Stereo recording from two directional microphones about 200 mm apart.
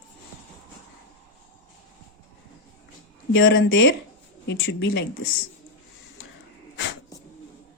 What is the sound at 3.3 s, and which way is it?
Speech, 70° left (ahead or behind).